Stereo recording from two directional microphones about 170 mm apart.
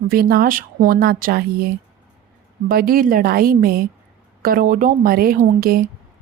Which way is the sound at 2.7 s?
60° right (ahead or behind).